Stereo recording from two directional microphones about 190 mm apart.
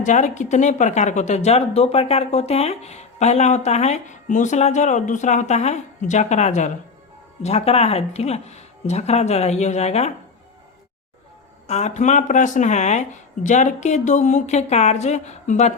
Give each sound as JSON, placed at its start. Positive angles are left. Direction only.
{"t": 0.0, "sound": "speech", "side_deg": 40}
{"t": 11.7, "sound": "speech", "side_deg": 35}